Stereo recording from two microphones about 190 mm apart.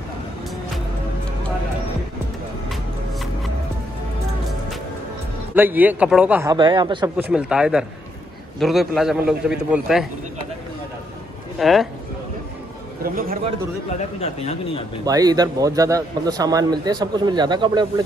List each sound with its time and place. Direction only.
5.5 s speech: 10° right (ahead or behind)
6.5 s speech: 25° right (ahead or behind)
7.2 s a man's voice: 5° right (ahead or behind)
11.5 s speech: centre (ahead or behind)
13.0 s a man's voice: 50° right (ahead or behind)
14.2 s speech: 35° left (ahead or behind)
15.0 s speech: 20° right (ahead or behind)